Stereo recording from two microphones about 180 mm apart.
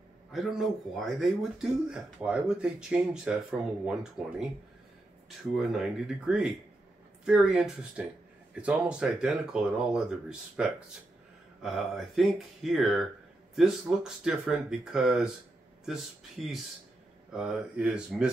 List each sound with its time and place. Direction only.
0.3 s a man's voice: centre (ahead or behind)